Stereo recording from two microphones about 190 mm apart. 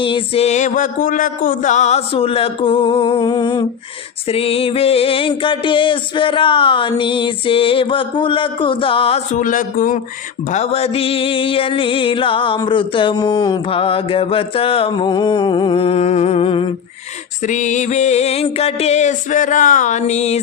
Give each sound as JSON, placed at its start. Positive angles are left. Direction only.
{"t": 0.0, "sound": "mantra", "side_deg": 30}
{"t": 17.4, "sound": "music", "side_deg": 40}